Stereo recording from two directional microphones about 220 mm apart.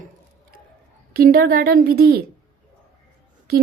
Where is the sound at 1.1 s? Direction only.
45° right (ahead or behind).